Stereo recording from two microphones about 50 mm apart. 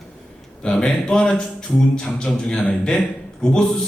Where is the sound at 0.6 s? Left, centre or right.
Centre.